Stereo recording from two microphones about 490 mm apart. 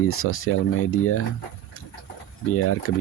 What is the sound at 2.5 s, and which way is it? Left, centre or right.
Speech, left.